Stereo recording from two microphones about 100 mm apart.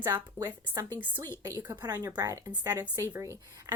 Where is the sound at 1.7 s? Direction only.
40° right (ahead or behind).